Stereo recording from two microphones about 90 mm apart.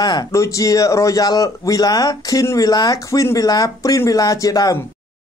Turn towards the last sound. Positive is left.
turn(degrees=40)  # may be behind; listen again after turning